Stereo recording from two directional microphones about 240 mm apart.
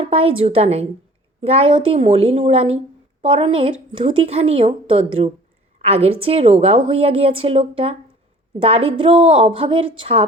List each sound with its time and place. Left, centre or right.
0.0 s a woman's voice: right